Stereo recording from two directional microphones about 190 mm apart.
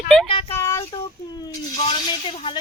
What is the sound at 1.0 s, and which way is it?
Speech, 20° left (ahead or behind).